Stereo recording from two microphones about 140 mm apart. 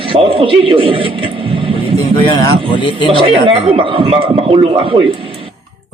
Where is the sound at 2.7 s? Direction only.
35° left (ahead or behind).